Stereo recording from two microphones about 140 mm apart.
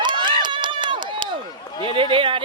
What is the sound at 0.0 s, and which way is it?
Run, 35° right (ahead or behind).